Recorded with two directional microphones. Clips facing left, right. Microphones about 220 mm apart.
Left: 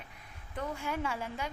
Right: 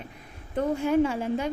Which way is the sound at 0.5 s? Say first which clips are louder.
Right 12 dB; 45° right (ahead or behind).